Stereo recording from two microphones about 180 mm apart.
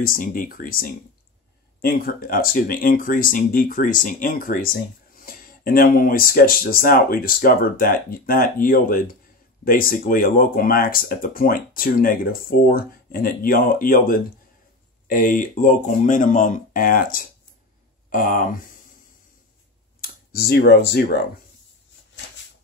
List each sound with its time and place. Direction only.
0.0 s speech: 50° left (ahead or behind)
20.0 s speech: 60° left (ahead or behind)